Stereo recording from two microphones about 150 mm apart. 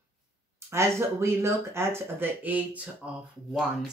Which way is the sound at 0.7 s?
20° right (ahead or behind).